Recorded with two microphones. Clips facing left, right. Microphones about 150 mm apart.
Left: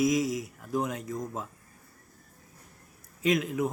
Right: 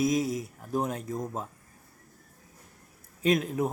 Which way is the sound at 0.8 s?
30° right (ahead or behind).